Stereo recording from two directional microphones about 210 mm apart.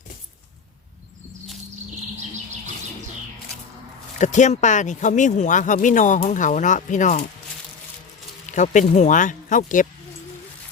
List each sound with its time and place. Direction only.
4.2 s speech: 35° left (ahead or behind)
8.4 s speech: 35° left (ahead or behind)